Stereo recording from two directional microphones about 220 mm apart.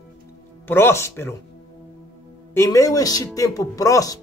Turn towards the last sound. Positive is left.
turn(degrees=15)  # may be behind; listen again after turning